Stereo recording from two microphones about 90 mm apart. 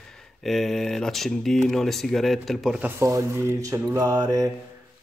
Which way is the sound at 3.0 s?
35° right (ahead or behind).